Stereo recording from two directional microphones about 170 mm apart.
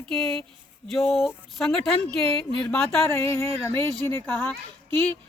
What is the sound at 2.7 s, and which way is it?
Speech, 15° left (ahead or behind).